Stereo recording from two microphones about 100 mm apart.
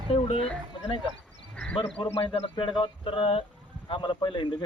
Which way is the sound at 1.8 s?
80° left.